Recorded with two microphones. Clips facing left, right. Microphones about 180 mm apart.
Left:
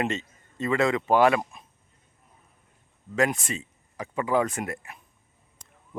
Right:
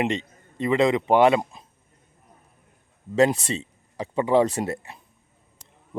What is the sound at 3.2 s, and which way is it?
A man's voice, 35° right (ahead or behind).